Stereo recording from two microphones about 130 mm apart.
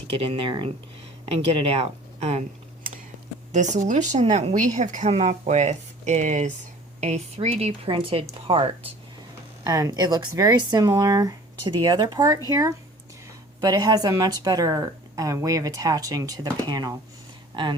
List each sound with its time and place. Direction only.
0.2 s speech: 45° right (ahead or behind)
3.5 s a woman's voice: 70° right (ahead or behind)
7.9 s a woman's voice: 45° right (ahead or behind)
9.6 s speech: 25° right (ahead or behind)